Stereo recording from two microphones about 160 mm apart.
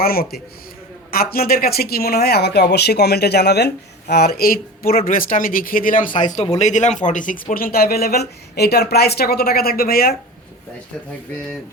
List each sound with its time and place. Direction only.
0.0 s speech: 70° left (ahead or behind)